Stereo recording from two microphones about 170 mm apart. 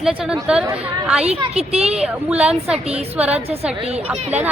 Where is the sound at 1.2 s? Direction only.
35° right (ahead or behind).